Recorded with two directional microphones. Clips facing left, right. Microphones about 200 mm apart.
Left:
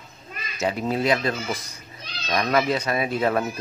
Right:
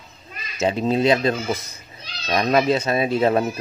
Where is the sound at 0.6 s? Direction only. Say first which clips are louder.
Right 4 dB; 25° right (ahead or behind).